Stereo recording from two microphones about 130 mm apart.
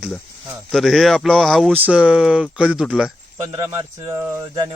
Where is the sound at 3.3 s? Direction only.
30° right (ahead or behind).